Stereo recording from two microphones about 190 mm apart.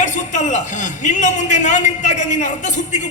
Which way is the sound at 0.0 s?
40° left (ahead or behind).